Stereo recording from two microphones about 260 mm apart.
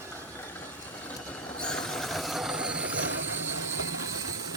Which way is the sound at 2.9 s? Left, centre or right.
Right.